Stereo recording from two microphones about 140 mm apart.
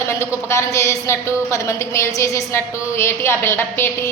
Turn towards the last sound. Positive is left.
turn(degrees=15)  # may be behind; listen again after turning